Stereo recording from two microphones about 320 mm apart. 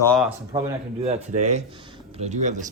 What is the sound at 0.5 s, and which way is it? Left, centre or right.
A man's voice, centre.